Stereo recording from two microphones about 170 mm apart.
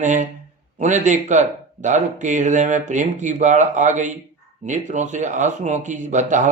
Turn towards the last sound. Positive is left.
turn(degrees=-45)  # may be behind; listen again after turning